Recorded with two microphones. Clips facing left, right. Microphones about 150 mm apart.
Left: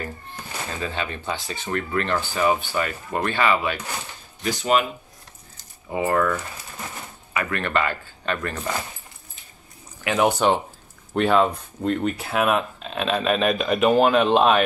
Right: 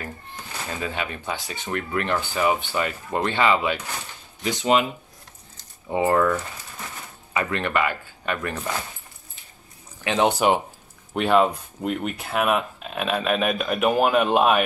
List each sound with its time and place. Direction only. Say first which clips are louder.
0.7 s speech: even; 10° right (ahead or behind)
5.9 s speech: right 2 dB; 25° right (ahead or behind)
7.3 s speech: even; 20° right (ahead or behind)
10.0 s speech: even; 25° right (ahead or behind)
11.1 s speech: even; 5° right (ahead or behind)